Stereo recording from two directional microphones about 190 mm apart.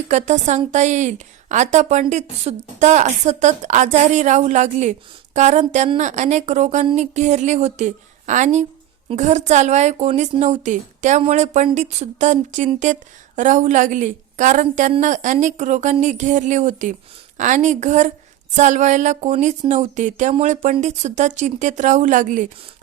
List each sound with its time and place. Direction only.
0.1 s a woman's voice: 40° right (ahead or behind)